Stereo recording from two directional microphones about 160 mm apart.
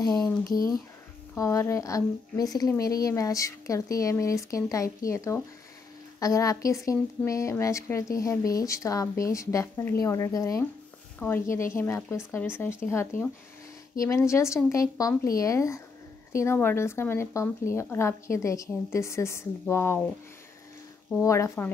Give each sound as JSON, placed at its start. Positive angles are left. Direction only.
{"t": 1.3, "sound": "a woman's voice", "side_deg": 20}
{"t": 21.2, "sound": "speech", "side_deg": 20}